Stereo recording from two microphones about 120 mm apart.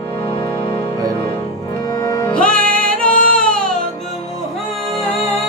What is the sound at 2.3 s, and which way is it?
Music, 10° left (ahead or behind).